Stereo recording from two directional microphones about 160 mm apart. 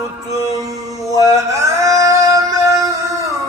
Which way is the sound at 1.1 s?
20° right (ahead or behind).